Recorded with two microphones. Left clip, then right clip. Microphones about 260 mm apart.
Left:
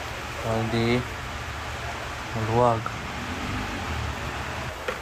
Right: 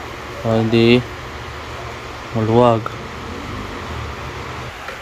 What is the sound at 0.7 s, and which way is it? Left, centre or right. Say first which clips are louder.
Speech: right 13 dB; right.